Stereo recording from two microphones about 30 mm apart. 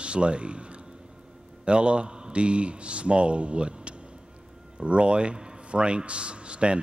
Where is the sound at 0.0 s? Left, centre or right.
Right.